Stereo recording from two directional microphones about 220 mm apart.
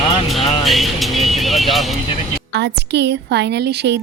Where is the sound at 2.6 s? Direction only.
50° right (ahead or behind).